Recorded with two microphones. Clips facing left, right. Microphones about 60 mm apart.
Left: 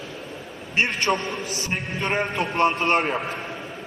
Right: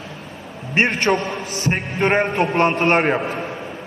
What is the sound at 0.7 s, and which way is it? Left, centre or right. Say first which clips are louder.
A man's voice: right 5 dB; right.